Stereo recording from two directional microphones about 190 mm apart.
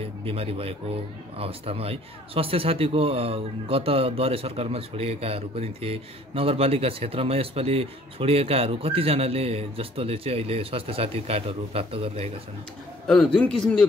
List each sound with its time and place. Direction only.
0.2 s speech: 30° right (ahead or behind)
13.0 s a man's voice: 5° left (ahead or behind)